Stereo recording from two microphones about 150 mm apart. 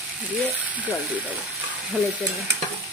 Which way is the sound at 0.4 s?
10° right (ahead or behind).